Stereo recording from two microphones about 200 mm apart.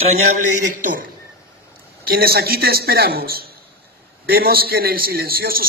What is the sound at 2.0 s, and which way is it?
A man's voice, 50° right (ahead or behind).